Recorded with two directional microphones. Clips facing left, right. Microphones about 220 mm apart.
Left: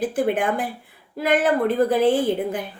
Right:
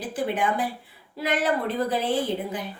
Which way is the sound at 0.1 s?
50° left (ahead or behind).